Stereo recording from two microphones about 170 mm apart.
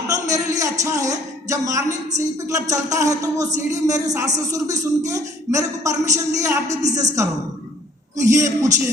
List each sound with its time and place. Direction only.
0.1 s speech: 20° right (ahead or behind)
8.1 s a man's voice: 20° right (ahead or behind)